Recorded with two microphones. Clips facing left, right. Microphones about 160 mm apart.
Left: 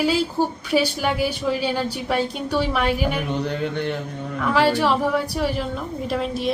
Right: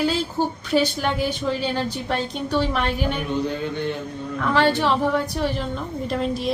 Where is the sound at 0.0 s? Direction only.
10° left (ahead or behind).